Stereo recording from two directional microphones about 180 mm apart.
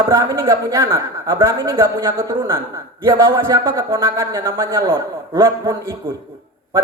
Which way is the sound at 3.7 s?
15° right (ahead or behind).